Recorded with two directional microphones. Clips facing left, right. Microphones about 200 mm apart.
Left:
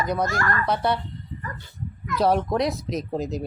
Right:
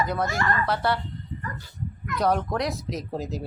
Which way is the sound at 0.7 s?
20° left (ahead or behind).